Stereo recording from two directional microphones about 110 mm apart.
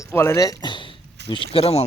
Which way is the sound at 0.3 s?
35° left (ahead or behind).